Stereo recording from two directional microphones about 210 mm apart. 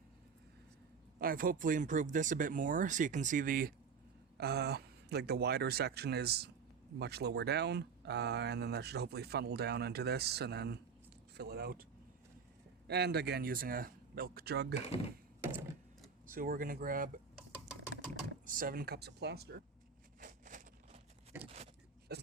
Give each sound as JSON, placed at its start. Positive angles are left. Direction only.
{"t": 1.2, "sound": "speech", "side_deg": -40}
{"t": 12.9, "sound": "speech", "side_deg": -50}
{"t": 15.4, "sound": "a sound", "side_deg": -10}
{"t": 16.2, "sound": "speech", "side_deg": -40}
{"t": 18.4, "sound": "speech", "side_deg": -40}
{"t": 20.1, "sound": "a sound", "side_deg": -40}
{"t": 21.3, "sound": "vehicle", "side_deg": -10}
{"t": 22.1, "sound": "hiccup", "side_deg": -50}